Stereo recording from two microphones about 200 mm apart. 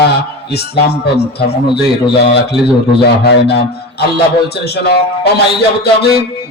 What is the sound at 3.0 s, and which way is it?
A man's voice, 55° left (ahead or behind).